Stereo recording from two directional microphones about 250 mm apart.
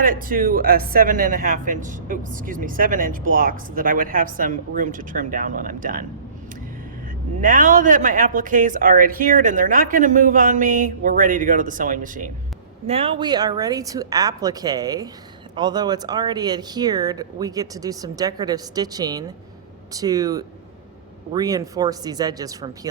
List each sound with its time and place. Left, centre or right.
0.0 s speech: right
7.4 s speech: right; by 22.9 s centre